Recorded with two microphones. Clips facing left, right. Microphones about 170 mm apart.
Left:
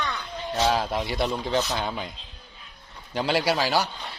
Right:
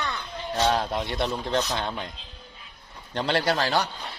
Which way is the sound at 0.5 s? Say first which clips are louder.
Even; centre (ahead or behind).